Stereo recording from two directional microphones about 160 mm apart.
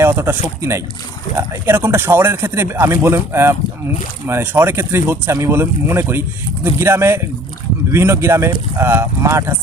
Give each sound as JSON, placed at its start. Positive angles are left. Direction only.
{"t": 0.0, "sound": "speech", "side_deg": -15}
{"t": 1.4, "sound": "speech", "side_deg": -15}